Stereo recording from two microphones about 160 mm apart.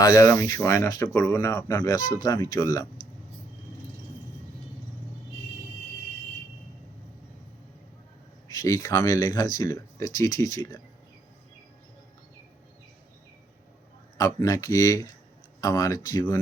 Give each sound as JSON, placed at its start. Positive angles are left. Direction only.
{"t": 0.0, "sound": "speech", "side_deg": 20}
{"t": 8.5, "sound": "speech", "side_deg": 20}
{"t": 14.2, "sound": "speech", "side_deg": 20}